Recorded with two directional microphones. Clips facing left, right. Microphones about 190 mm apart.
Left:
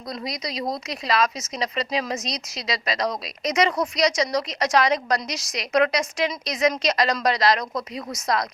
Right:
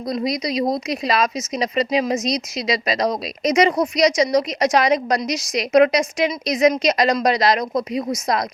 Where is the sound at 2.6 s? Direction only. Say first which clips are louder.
Right 5 dB; 20° right (ahead or behind).